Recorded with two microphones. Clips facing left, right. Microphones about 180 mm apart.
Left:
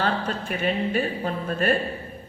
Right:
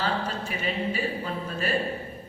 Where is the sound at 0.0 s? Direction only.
55° left (ahead or behind).